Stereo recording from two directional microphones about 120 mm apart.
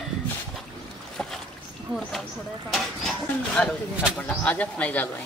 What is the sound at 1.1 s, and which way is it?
Boat, 5° left (ahead or behind).